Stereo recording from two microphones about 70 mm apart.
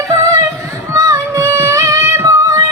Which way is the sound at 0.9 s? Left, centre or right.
Right.